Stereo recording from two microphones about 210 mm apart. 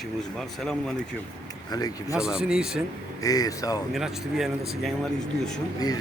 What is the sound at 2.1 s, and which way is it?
Speech, 5° right (ahead or behind).